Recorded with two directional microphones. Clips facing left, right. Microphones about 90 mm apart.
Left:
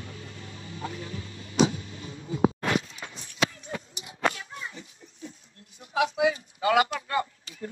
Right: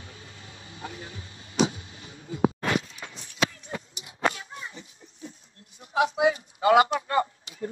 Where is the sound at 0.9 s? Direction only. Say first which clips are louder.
Left 4 dB; 30° right (ahead or behind).